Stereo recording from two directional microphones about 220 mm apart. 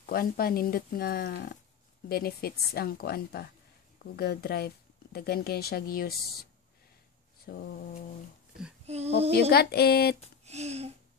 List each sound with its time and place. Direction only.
0.0 s speech: 40° left (ahead or behind)
7.4 s speech: 45° left (ahead or behind)
8.8 s child singing: 30° right (ahead or behind)
9.5 s speech: 45° left (ahead or behind)
10.4 s a sound: 30° right (ahead or behind)